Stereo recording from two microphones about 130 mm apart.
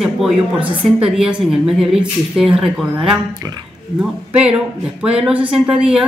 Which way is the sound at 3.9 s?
10° right (ahead or behind).